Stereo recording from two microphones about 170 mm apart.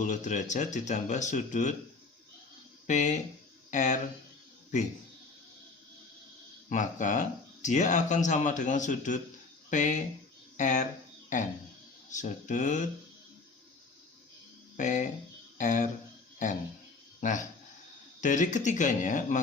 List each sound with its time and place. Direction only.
0.0 s speech: 45° left (ahead or behind)
2.8 s speech: 45° left (ahead or behind)
6.7 s speech: 50° left (ahead or behind)
14.8 s speech: 45° left (ahead or behind)
17.2 s a man's voice: 50° left (ahead or behind)